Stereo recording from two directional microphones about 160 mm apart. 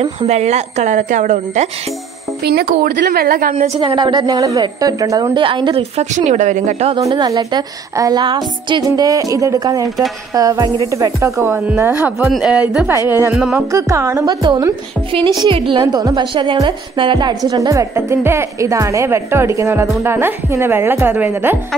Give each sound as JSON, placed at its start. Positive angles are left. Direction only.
{"t": 0.0, "sound": "a woman's voice", "side_deg": -40}
{"t": 2.4, "sound": "speech", "side_deg": -75}
{"t": 3.5, "sound": "a woman's voice", "side_deg": -45}
{"t": 3.8, "sound": "a woman's voice", "side_deg": -30}
{"t": 5.4, "sound": "a woman's voice", "side_deg": -30}
{"t": 5.9, "sound": "a woman's voice", "side_deg": -45}
{"t": 7.0, "sound": "a woman's voice", "side_deg": -20}
{"t": 12.3, "sound": "speech", "side_deg": -5}
{"t": 13.7, "sound": "a woman's voice", "side_deg": -20}
{"t": 15.7, "sound": "a woman's voice", "side_deg": -25}